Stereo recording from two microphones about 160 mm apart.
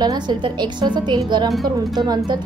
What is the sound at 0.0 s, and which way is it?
A woman's voice, 25° right (ahead or behind).